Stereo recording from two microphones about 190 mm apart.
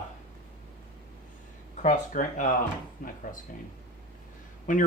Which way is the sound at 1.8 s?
45° left (ahead or behind).